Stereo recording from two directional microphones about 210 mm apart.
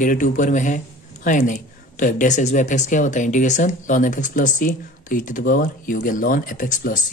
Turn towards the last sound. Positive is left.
turn(degrees=40)  # may be behind; listen again after turning